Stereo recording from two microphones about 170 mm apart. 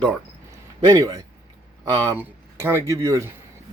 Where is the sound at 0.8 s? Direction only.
20° right (ahead or behind).